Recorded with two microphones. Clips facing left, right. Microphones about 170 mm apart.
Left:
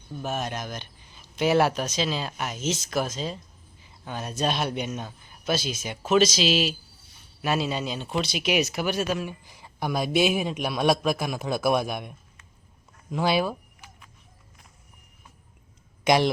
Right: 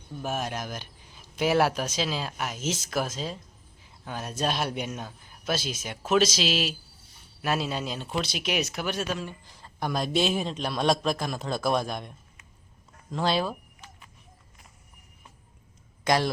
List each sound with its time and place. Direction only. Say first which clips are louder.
0.2 s speech: left 1 dB; 5° right (ahead or behind)
13.1 s a sound: left 2 dB; 10° left (ahead or behind)
16.0 s speech: left 4 dB; 15° left (ahead or behind)